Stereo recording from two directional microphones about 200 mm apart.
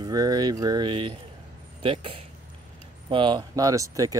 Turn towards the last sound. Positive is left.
turn(degrees=-15)  # may be behind; listen again after turning